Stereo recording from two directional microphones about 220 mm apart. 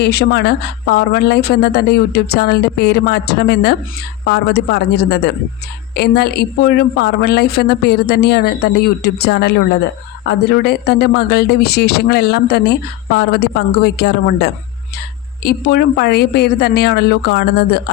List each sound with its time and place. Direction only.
0.0 s a woman's voice: 45° left (ahead or behind)